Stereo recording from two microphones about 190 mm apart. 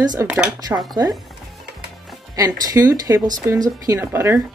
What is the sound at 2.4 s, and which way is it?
Speech, 20° right (ahead or behind).